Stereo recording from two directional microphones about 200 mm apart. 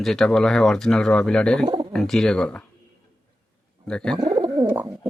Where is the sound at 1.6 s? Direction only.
25° right (ahead or behind).